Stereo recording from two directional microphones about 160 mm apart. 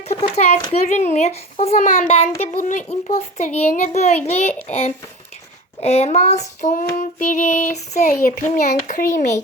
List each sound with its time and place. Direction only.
0.1 s a child's voice: 40° left (ahead or behind)